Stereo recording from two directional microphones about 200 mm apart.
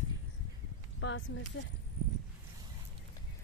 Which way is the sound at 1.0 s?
70° left (ahead or behind).